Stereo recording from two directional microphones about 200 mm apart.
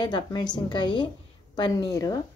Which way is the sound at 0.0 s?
20° left (ahead or behind).